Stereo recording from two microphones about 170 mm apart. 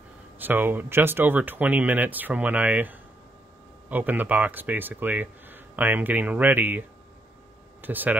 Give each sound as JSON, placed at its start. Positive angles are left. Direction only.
{"t": 0.4, "sound": "speech", "side_deg": -10}
{"t": 7.8, "sound": "speech", "side_deg": -10}